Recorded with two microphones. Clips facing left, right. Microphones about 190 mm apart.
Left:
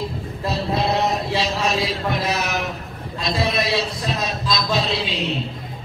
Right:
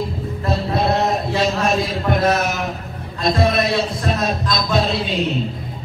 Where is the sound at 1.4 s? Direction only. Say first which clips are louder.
Right 4 dB; 50° right (ahead or behind).